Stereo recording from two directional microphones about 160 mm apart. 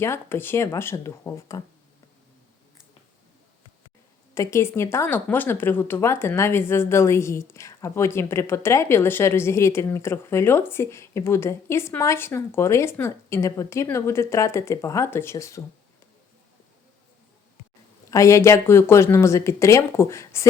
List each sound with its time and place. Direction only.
0.0 s speech: 15° left (ahead or behind)
4.4 s speech: 15° left (ahead or behind)
18.1 s speech: 20° left (ahead or behind)